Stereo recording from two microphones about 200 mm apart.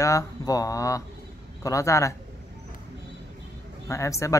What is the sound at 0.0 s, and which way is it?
Speech, 15° left (ahead or behind).